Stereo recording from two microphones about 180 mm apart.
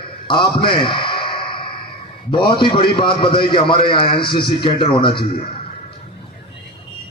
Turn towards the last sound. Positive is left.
turn(degrees=30)  # may be behind; listen again after turning